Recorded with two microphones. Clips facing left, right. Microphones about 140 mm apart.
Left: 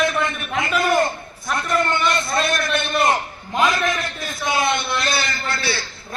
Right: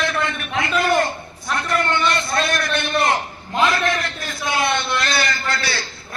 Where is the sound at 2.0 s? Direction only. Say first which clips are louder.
Even; centre (ahead or behind).